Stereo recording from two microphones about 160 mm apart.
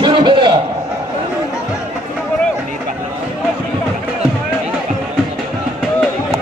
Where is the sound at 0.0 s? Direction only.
30° right (ahead or behind).